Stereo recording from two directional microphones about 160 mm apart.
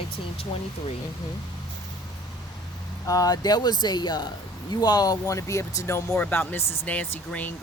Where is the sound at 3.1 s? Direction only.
25° left (ahead or behind).